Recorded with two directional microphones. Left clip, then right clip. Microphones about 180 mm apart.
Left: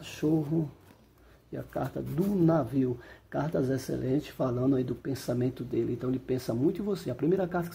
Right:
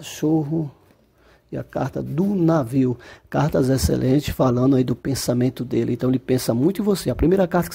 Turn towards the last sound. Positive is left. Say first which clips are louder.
# right 10 dB
turn(degrees=-45)  # may be behind; listen again after turning